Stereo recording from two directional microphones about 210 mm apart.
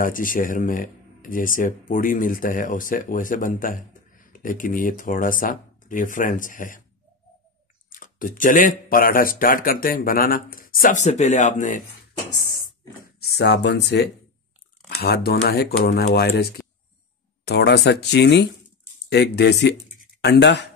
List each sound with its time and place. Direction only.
0.0 s speech: 40° left (ahead or behind)
7.9 s speech: 40° left (ahead or behind)
12.4 s a sound: 45° left (ahead or behind)
15.0 s speech: 50° left (ahead or behind)
17.5 s speech: 50° left (ahead or behind)